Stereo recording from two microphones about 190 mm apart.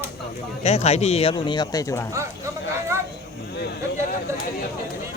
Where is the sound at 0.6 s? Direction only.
35° left (ahead or behind); by 2.0 s 15° left (ahead or behind).